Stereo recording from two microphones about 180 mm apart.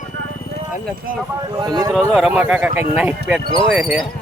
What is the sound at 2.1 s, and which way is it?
Speech, 5° right (ahead or behind).